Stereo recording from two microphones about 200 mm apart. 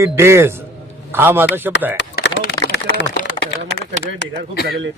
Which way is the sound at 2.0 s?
60° left (ahead or behind).